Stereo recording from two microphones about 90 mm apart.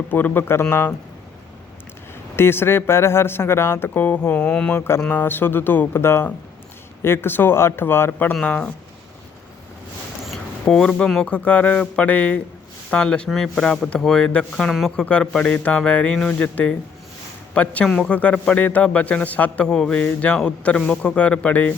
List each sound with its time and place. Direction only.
0.1 s speech: 20° left (ahead or behind)
2.3 s speech: 25° left (ahead or behind)
5.0 s speech: 20° left (ahead or behind)
8.4 s speech: 15° left (ahead or behind)
10.2 s a sound: 5° left (ahead or behind)
11.1 s a man's voice: 10° left (ahead or behind)
19.6 s speech: 5° left (ahead or behind)